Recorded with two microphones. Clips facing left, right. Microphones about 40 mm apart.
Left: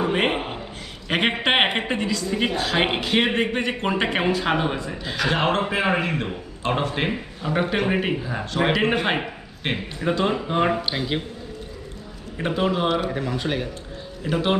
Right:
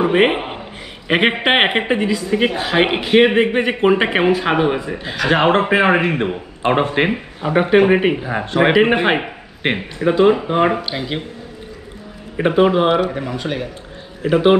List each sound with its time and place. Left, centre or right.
0.0 s a man's voice: right
5.3 s speech: right
10.0 s speech: centre
10.8 s speech: centre
12.4 s speech: right
13.4 s speech: centre
14.2 s speech: right